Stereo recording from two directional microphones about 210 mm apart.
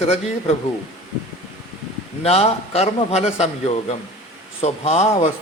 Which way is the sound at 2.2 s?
30° left (ahead or behind).